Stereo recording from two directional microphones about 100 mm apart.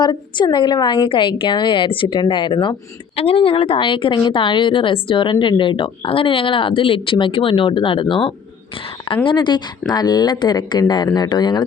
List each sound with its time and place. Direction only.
0.0 s a woman's voice: 50° left (ahead or behind)
3.2 s a woman's voice: 70° left (ahead or behind)
9.2 s a woman's voice: 50° left (ahead or behind)